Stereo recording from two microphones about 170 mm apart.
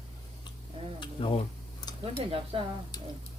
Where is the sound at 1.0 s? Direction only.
30° left (ahead or behind).